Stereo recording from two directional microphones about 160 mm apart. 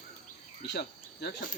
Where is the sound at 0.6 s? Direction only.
85° left.